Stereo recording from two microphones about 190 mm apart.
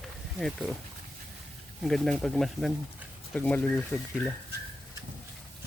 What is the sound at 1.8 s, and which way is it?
Speech, 5° left (ahead or behind).